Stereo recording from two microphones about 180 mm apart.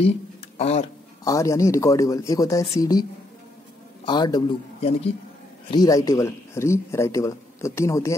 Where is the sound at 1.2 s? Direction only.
15° left (ahead or behind); by 5.1 s 35° left (ahead or behind).